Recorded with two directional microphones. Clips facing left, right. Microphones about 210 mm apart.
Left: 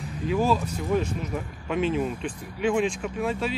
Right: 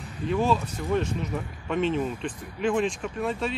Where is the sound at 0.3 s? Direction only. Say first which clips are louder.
Left 1 dB; 5° left (ahead or behind).